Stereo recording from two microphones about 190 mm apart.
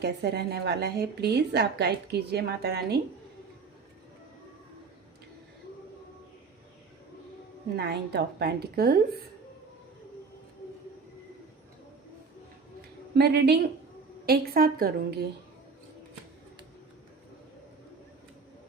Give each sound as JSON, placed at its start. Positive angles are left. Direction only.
{"t": 0.0, "sound": "a woman's voice", "side_deg": -60}
{"t": 7.8, "sound": "a woman's voice", "side_deg": -60}
{"t": 13.1, "sound": "a woman's voice", "side_deg": -60}
{"t": 14.3, "sound": "a woman's voice", "side_deg": -50}